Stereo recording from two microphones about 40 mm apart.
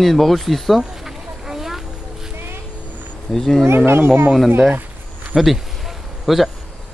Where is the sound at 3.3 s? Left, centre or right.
Centre.